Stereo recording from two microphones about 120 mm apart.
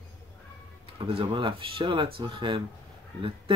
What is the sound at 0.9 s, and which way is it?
Speech, 50° right (ahead or behind).